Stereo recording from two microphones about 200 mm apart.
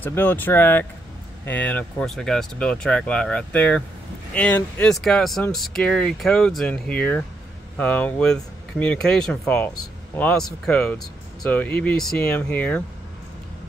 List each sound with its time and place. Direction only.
0.0 s speech: 10° left (ahead or behind)